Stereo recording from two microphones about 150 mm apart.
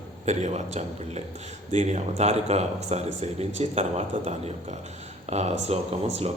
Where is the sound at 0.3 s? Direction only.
50° right (ahead or behind).